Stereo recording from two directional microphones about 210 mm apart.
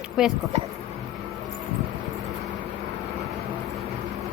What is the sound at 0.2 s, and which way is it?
Speech, 5° right (ahead or behind).